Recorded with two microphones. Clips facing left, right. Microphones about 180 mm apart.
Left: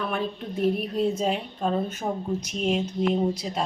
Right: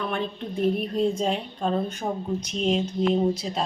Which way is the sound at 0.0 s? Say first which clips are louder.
Even; 5° left (ahead or behind).